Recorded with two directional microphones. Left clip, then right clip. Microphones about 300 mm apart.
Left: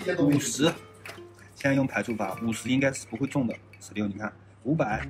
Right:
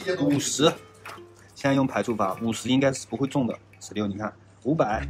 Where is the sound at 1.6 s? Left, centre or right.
Right.